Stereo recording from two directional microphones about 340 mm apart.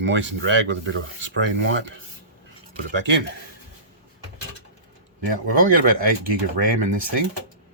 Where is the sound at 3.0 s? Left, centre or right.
Right.